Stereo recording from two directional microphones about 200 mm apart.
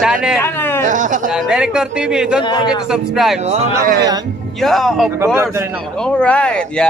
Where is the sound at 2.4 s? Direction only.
20° left (ahead or behind).